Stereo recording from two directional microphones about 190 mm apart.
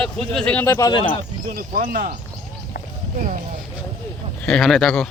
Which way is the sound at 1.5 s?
50° right (ahead or behind).